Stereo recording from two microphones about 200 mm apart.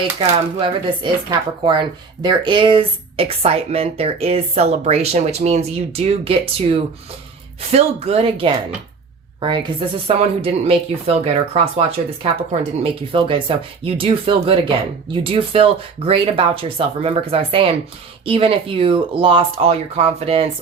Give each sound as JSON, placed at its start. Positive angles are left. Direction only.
{"t": 0.2, "sound": "speech", "side_deg": -25}